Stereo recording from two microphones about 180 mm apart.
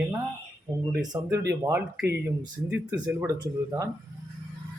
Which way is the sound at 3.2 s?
15° right (ahead or behind).